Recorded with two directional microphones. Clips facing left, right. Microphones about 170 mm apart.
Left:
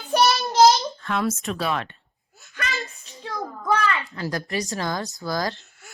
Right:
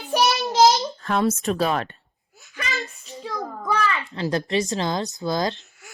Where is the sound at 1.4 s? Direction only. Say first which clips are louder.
Right 4 dB; 40° right (ahead or behind).